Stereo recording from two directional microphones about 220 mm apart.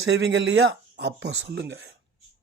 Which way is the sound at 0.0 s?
50° right (ahead or behind).